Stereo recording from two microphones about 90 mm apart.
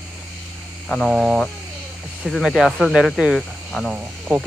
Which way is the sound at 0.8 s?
10° left (ahead or behind).